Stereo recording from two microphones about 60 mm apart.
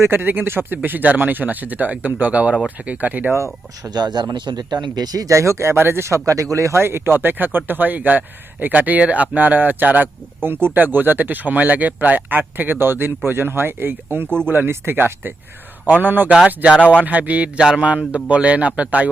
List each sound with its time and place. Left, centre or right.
0.0 s speech: right
4.5 s speech: right
5.7 s speech: right
14.3 s speech: centre
14.5 s speech: right